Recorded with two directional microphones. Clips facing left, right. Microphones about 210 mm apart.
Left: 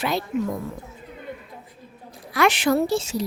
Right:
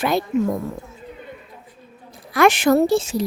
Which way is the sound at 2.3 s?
50° right (ahead or behind).